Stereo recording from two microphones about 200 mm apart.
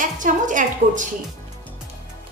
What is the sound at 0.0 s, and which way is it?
A woman's voice, 40° right (ahead or behind).